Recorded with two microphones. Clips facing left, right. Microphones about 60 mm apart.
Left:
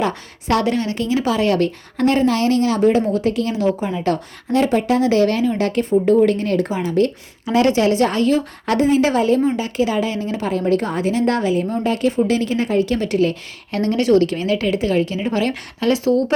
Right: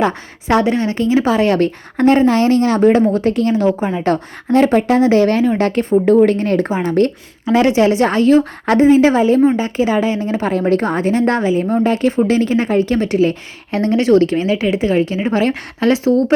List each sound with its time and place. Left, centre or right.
0.0 s a woman's voice: right
6.8 s speech: right
7.4 s a woman's voice: right
9.4 s a woman's voice: right
10.4 s a woman's voice: right